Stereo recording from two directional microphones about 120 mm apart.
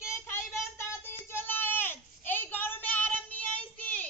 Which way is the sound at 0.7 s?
20° left (ahead or behind).